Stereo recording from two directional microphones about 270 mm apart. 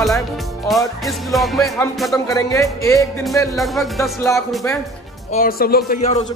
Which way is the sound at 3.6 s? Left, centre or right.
Centre.